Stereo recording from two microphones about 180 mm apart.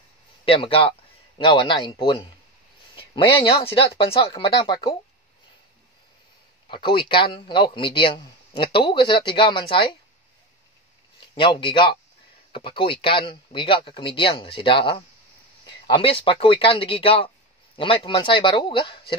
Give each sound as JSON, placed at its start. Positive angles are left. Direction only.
{"t": 0.5, "sound": "speech", "side_deg": 30}
{"t": 6.7, "sound": "speech", "side_deg": 25}
{"t": 11.1, "sound": "speech", "side_deg": 30}